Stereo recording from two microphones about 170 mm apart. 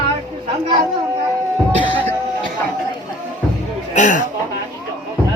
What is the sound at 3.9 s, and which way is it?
Speech, 45° left (ahead or behind).